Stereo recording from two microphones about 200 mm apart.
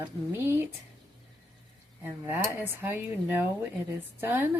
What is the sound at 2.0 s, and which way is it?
Speech, 10° right (ahead or behind).